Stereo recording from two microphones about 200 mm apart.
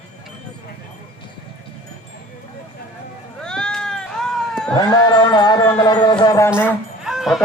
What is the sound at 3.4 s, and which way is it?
Cat, 5° left (ahead or behind).